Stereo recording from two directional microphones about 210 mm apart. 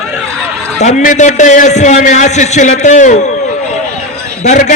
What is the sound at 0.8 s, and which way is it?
A man's voice, 35° left (ahead or behind).